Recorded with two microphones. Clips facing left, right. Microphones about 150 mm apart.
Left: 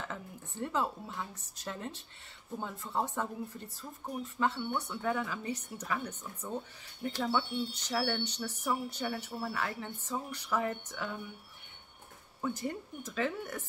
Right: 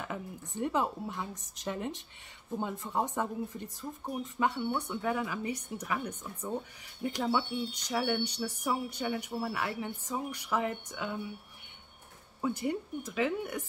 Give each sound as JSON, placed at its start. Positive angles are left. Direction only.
{"t": 0.0, "sound": "speech", "side_deg": -15}
{"t": 12.4, "sound": "speech", "side_deg": -10}